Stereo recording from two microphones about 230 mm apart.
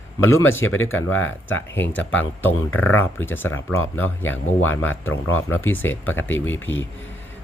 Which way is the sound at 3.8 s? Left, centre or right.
Left.